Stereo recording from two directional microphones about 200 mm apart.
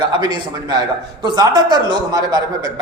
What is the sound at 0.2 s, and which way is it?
A man's voice, 20° right (ahead or behind).